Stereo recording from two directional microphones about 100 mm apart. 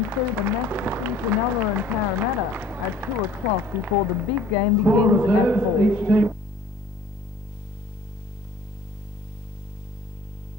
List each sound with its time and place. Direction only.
0.1 s speech: 20° right (ahead or behind)